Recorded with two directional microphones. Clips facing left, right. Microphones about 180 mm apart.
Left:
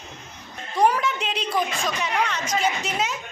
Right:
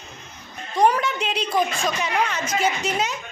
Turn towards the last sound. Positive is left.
turn(degrees=0)  # may be behind; listen again after turning